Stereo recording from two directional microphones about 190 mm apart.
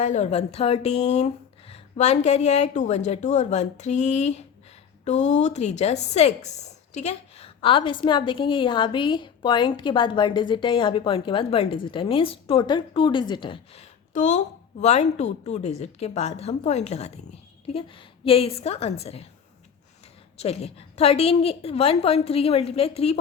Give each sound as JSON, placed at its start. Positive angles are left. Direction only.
{"t": 0.0, "sound": "a woman's voice", "side_deg": 40}
{"t": 14.1, "sound": "a woman's voice", "side_deg": 40}
{"t": 20.4, "sound": "a woman's voice", "side_deg": 30}